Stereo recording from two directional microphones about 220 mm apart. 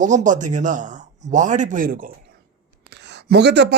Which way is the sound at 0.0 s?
35° right (ahead or behind).